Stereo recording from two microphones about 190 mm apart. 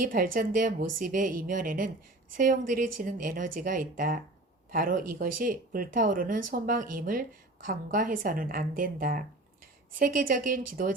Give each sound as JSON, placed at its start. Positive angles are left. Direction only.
{"t": 0.0, "sound": "speech", "side_deg": -45}